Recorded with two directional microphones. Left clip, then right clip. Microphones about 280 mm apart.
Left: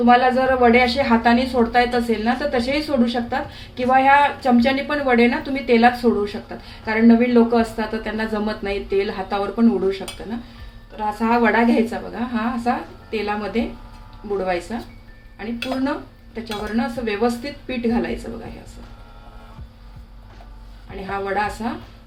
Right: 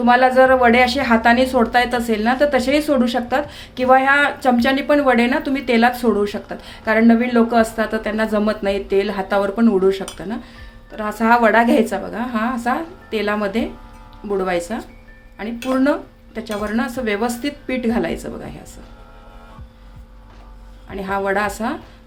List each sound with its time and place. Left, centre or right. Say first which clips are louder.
0.0 s a woman's voice: right 3 dB; right
16.3 s a woman's voice: right 3 dB; right
20.9 s a woman's voice: right 4 dB; right